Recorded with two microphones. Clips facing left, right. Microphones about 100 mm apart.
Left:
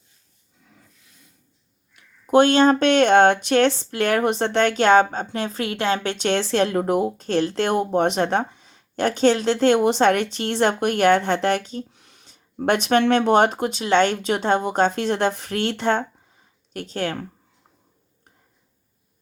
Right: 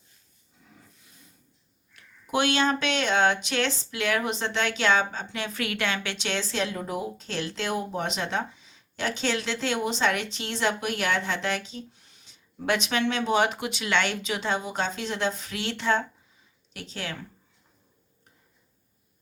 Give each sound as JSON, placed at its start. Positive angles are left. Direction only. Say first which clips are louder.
{"t": 2.2, "sound": "speech", "louder": "left 9 dB", "side_deg": 45}